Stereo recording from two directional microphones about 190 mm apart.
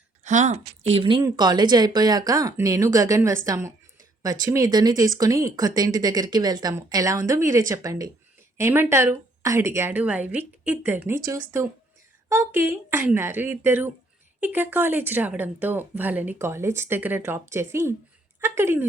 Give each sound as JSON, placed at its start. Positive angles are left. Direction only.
{"t": 0.3, "sound": "a woman's voice", "side_deg": -40}